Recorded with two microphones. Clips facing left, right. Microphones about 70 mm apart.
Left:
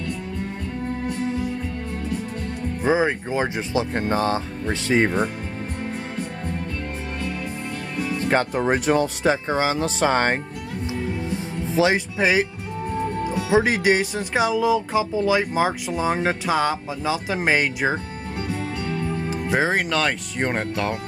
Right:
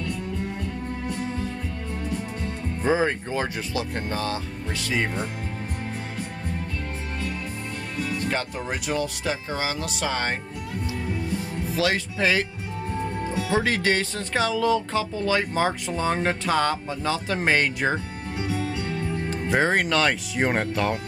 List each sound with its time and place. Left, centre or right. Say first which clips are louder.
2.8 s speech: left 2 dB; centre; by 5.3 s left
8.1 s speech: left 8 dB; left
11.6 s speech: left 6 dB; left
13.5 s speech: left 5 dB; centre
19.5 s speech: even; centre